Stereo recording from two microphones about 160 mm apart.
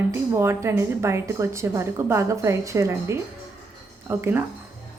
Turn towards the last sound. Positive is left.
turn(degrees=-15)  # may be behind; listen again after turning